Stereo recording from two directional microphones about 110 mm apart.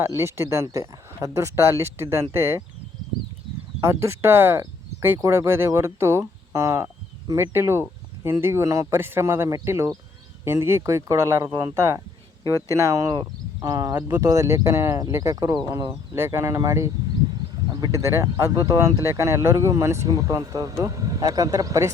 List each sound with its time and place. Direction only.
0.0 s speech: 25° right (ahead or behind)
3.8 s speech: 25° right (ahead or behind)